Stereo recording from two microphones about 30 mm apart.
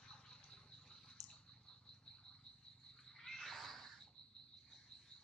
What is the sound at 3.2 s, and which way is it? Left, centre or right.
Frog, centre.